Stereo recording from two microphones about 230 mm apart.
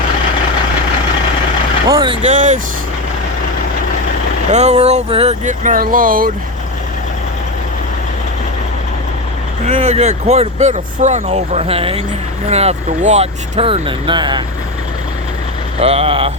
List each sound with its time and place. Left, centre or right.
1.9 s speech: centre
2.3 s speech: right
4.5 s speech: right
9.6 s speech: right
15.8 s speech: right